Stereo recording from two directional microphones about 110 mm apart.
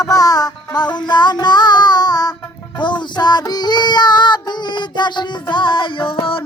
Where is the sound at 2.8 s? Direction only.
45° left (ahead or behind).